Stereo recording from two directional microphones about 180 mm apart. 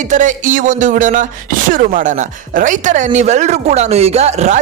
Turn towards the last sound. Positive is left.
turn(degrees=-40)  # may be behind; listen again after turning